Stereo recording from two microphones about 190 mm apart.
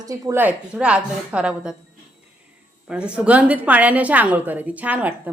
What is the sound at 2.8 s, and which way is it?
A woman's voice, 5° right (ahead or behind).